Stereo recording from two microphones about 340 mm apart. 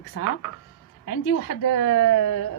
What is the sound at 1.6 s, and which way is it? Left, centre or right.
Speech, left.